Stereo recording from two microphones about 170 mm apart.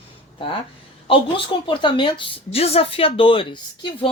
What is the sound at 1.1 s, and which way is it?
A woman's voice, 30° left (ahead or behind).